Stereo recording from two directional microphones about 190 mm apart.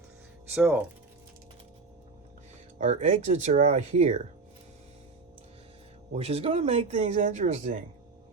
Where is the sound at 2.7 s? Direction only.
35° right (ahead or behind).